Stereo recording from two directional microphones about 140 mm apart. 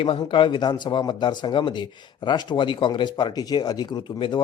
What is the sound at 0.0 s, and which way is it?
Speech, 40° left (ahead or behind).